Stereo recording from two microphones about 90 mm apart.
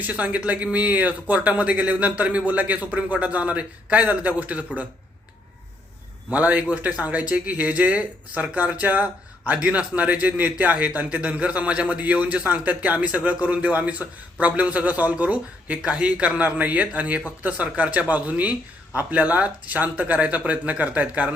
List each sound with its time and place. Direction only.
0.0 s a man's voice: 15° right (ahead or behind)
6.3 s a man's voice: 15° right (ahead or behind)